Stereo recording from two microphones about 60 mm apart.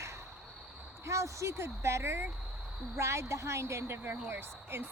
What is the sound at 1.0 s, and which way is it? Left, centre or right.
Speech, right.